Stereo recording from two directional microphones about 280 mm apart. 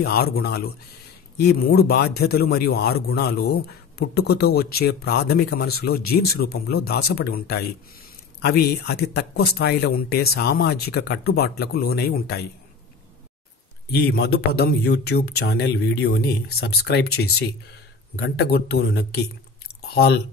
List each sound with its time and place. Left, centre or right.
0.0 s speech: left
13.9 s speech: left
18.1 s speech: left